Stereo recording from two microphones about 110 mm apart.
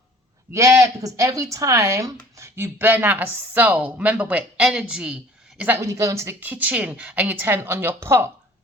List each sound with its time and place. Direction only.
0.5 s a woman's voice: 30° right (ahead or behind)
5.8 s a woman's voice: 30° right (ahead or behind)